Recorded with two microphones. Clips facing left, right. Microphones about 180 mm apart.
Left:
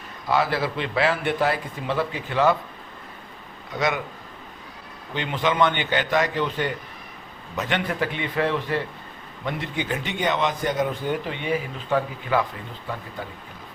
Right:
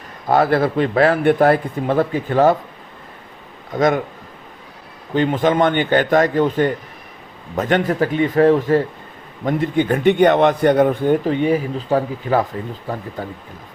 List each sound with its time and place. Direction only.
0.3 s a man's voice: 50° right (ahead or behind)
3.7 s a man's voice: 50° right (ahead or behind)
5.1 s a man's voice: 45° right (ahead or behind)